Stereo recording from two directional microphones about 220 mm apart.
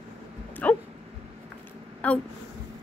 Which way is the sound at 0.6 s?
5° left (ahead or behind).